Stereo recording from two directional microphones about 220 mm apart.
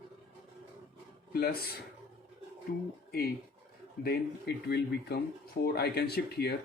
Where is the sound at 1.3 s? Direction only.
45° left (ahead or behind).